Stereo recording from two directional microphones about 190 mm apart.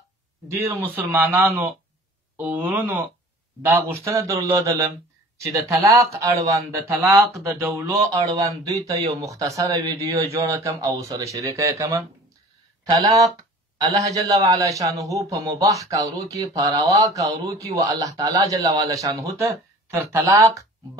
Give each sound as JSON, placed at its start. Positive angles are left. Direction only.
{"t": 0.6, "sound": "a man's voice", "side_deg": -10}